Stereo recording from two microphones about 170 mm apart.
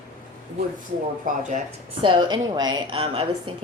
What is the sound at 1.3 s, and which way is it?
Speech, 50° right (ahead or behind).